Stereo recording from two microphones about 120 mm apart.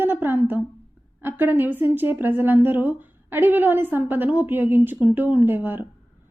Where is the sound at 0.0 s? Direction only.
15° right (ahead or behind).